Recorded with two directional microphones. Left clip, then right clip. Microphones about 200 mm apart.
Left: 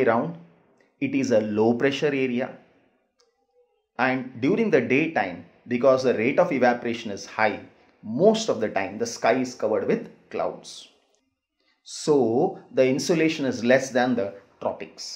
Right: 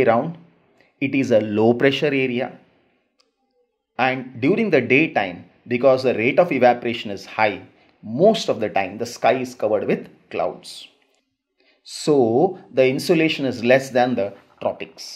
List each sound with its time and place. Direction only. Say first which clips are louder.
0.0 s speech: right 4 dB; 35° right (ahead or behind)
3.9 s speech: right 3 dB; 35° right (ahead or behind)